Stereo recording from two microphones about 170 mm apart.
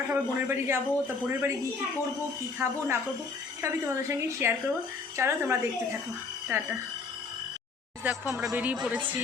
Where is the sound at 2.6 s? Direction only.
15° right (ahead or behind).